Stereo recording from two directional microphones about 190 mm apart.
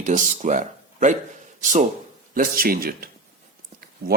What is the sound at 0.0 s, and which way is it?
Speech, 40° right (ahead or behind).